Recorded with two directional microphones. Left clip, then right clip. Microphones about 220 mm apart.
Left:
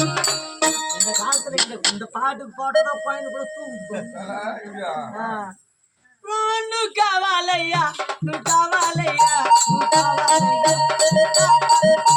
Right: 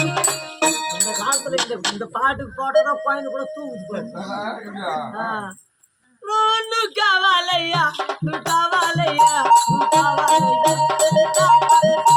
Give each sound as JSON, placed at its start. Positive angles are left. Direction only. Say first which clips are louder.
{"t": 1.5, "sound": "a sound", "louder": "even", "side_deg": 20}
{"t": 2.1, "sound": "music", "louder": "right 3 dB", "side_deg": -10}
{"t": 6.2, "sound": "music", "louder": "right 4 dB", "side_deg": -10}
{"t": 9.4, "sound": "music", "louder": "right 1 dB", "side_deg": 15}